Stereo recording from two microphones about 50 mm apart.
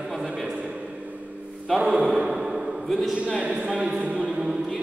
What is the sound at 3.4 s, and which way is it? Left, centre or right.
Speech, right.